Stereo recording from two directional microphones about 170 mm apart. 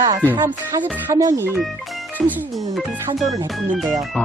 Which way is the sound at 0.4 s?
15° right (ahead or behind).